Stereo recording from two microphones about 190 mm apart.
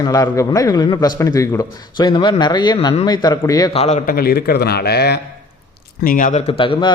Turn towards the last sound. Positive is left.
turn(degrees=25)  # may be behind; listen again after turning